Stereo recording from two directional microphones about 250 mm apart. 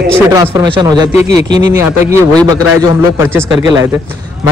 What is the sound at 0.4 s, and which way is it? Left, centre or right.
Speech, centre.